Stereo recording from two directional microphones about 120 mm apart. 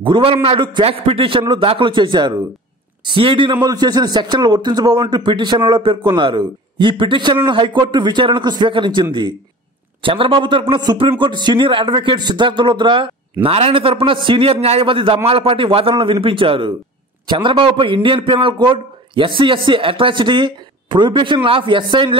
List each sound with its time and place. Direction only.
0.0 s a man's voice: 45° right (ahead or behind)
3.6 s a man's voice: 35° right (ahead or behind)
10.0 s a man's voice: 45° right (ahead or behind)